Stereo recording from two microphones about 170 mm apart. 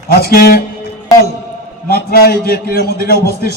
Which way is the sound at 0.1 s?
65° left (ahead or behind).